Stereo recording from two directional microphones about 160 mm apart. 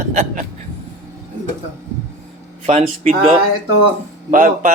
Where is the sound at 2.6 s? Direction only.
50° right (ahead or behind).